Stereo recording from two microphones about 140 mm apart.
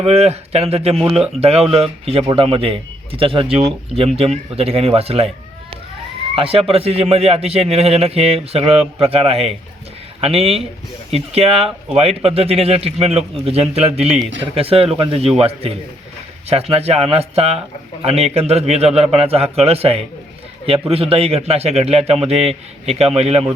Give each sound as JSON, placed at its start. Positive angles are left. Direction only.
{"t": 0.0, "sound": "a man's voice", "side_deg": -50}
{"t": 6.3, "sound": "speech", "side_deg": -40}